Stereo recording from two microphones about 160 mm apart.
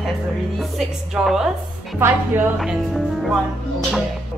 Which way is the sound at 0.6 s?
Centre (ahead or behind).